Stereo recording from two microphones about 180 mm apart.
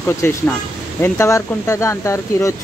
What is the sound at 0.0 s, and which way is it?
Speech, 15° left (ahead or behind).